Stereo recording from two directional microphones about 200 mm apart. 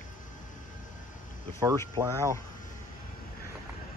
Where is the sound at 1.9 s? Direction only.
15° right (ahead or behind).